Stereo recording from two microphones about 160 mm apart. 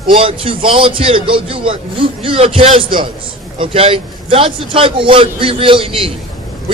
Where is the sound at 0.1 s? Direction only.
35° right (ahead or behind).